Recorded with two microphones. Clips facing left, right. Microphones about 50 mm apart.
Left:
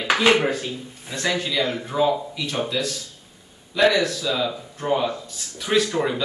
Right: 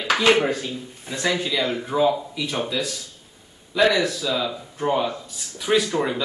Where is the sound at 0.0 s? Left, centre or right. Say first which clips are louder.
Even; centre.